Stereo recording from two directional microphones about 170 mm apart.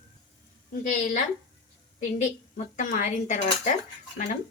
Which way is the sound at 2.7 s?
45° left (ahead or behind).